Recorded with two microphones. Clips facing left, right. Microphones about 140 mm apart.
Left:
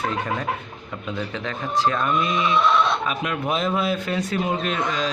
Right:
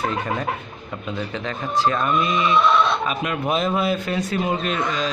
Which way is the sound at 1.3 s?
Centre (ahead or behind).